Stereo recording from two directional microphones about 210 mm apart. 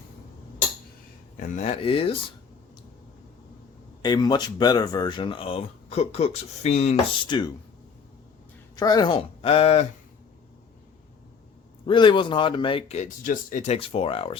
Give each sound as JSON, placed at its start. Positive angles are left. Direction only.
{"t": 1.4, "sound": "speech", "side_deg": 30}
{"t": 4.0, "sound": "speech", "side_deg": 20}
{"t": 6.9, "sound": "speech", "side_deg": 20}
{"t": 8.7, "sound": "speech", "side_deg": 20}
{"t": 11.9, "sound": "speech", "side_deg": 20}